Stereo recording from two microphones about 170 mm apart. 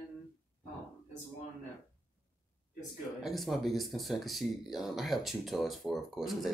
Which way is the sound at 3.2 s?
Centre (ahead or behind).